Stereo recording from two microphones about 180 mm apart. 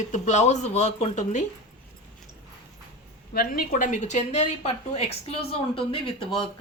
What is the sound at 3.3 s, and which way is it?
Speech, 55° left (ahead or behind).